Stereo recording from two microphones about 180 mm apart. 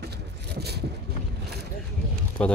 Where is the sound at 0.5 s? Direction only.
65° right (ahead or behind).